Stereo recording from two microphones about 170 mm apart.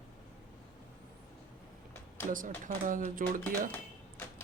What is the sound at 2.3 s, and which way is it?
Speech, 50° right (ahead or behind).